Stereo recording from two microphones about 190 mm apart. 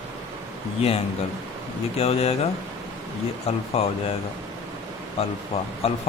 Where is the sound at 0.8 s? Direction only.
30° left (ahead or behind).